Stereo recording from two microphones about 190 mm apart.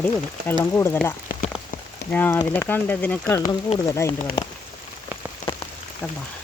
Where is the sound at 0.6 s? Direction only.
15° left (ahead or behind).